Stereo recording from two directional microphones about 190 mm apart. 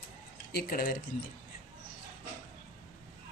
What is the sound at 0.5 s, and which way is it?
Speech, 45° left (ahead or behind).